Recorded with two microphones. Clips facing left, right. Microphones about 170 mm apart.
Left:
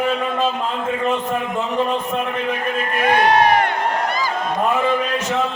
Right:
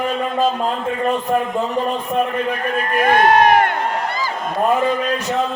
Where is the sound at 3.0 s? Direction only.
50° right (ahead or behind).